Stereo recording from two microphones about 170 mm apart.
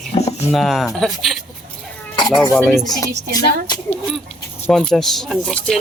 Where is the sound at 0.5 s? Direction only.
Centre (ahead or behind).